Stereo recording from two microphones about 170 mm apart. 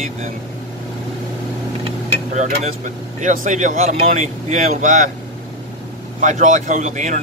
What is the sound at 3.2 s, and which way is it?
Speech, 50° right (ahead or behind).